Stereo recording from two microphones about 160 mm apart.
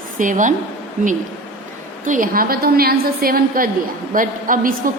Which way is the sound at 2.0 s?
55° right (ahead or behind).